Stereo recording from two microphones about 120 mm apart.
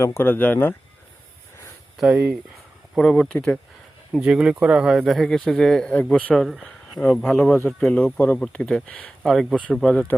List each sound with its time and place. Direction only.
0.0 s speech: 20° left (ahead or behind)
2.0 s speech: 10° right (ahead or behind)
2.9 s speech: 5° left (ahead or behind)
4.1 s speech: 5° right (ahead or behind)